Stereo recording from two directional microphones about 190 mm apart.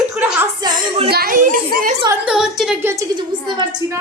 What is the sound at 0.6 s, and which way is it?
Speech, 25° right (ahead or behind).